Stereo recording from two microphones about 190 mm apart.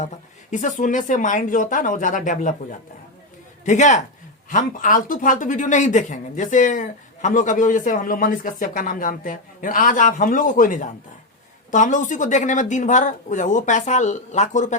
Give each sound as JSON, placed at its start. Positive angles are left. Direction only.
{"t": 0.8, "sound": "speech", "side_deg": 45}
{"t": 3.7, "sound": "speech", "side_deg": 40}